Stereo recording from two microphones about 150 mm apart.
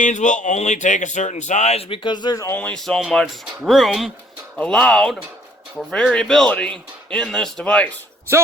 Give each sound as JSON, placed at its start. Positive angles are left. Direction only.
{"t": 0.0, "sound": "speech", "side_deg": 55}
{"t": 2.6, "sound": "speech", "side_deg": 5}